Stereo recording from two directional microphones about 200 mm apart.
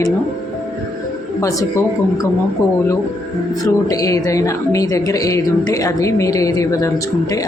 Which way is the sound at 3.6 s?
15° left (ahead or behind).